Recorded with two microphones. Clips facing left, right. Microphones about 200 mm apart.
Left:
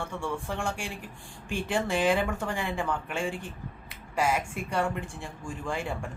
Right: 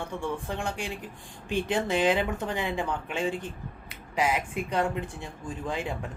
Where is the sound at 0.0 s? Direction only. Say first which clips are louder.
Right 1 dB; 15° right (ahead or behind).